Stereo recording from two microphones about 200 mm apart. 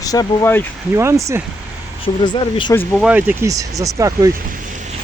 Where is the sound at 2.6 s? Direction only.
15° left (ahead or behind).